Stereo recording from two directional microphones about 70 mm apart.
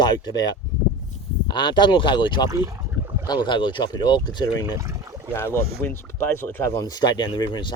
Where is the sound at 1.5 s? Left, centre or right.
Left.